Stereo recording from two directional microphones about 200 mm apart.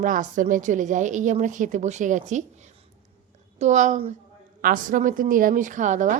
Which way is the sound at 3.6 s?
35° right (ahead or behind).